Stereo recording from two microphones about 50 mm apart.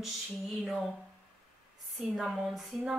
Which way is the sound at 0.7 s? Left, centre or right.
Centre.